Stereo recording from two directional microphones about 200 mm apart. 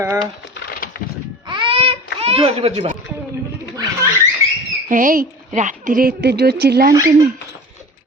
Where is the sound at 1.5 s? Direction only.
25° right (ahead or behind).